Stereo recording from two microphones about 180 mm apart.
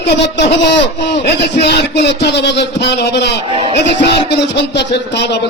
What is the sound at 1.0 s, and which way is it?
A man's voice, 70° left (ahead or behind).